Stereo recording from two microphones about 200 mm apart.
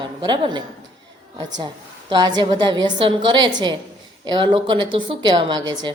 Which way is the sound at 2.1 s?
20° right (ahead or behind).